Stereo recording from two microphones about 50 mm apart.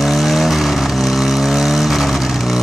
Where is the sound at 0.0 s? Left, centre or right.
Centre.